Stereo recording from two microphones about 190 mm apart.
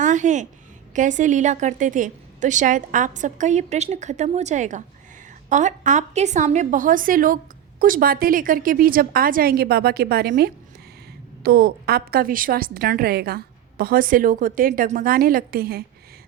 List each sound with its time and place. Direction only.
0.0 s a woman's voice: 40° right (ahead or behind)